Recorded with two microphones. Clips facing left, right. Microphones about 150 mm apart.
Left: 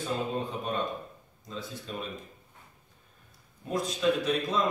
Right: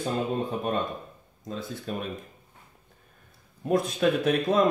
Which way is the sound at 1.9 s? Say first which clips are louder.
Right 6 dB; 55° right (ahead or behind).